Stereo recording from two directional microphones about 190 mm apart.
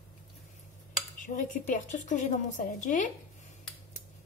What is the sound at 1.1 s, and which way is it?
A woman's voice, 45° left (ahead or behind).